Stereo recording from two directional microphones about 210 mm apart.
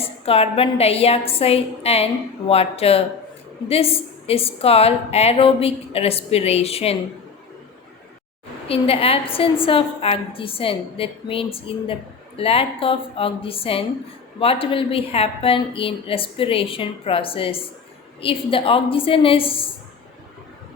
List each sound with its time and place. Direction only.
0.0 s a woman's voice: 30° left (ahead or behind)
8.6 s a woman's voice: 25° left (ahead or behind)